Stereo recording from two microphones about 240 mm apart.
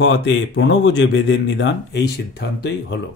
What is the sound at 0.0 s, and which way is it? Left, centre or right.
Speech, left.